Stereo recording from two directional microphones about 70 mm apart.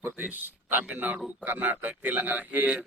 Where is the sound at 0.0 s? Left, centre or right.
Right.